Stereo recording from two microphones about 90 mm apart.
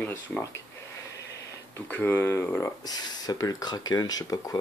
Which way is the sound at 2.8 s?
45° left (ahead or behind).